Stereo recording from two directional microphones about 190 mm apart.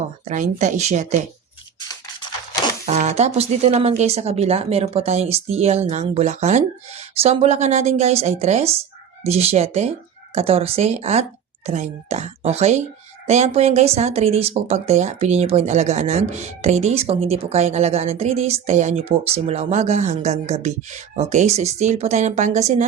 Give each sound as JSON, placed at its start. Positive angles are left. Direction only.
{"t": 0.3, "sound": "speech", "side_deg": -40}
{"t": 2.8, "sound": "speech", "side_deg": -35}